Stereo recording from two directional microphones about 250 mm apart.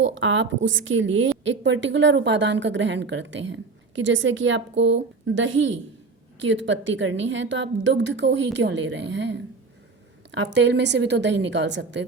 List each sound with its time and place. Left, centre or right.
0.0 s a woman's voice: right